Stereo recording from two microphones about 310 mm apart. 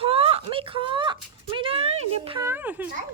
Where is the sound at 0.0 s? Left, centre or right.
Centre.